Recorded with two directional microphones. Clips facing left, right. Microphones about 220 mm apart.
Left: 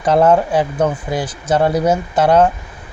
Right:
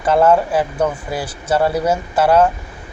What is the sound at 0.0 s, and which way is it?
Speech, 5° right (ahead or behind).